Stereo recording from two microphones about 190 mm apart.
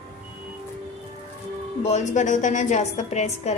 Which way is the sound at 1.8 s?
35° left (ahead or behind).